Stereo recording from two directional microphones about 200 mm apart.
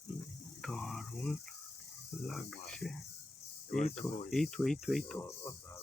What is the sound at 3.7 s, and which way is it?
Speech, 35° left (ahead or behind).